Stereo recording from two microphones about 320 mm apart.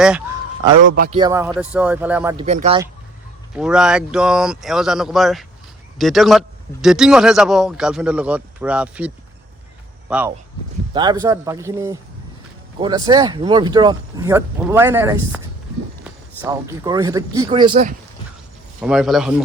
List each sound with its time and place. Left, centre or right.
0.9 s a man's voice: right
1.2 s speech: centre
2.3 s speech: centre
3.5 s speech: centre
18.8 s speech: centre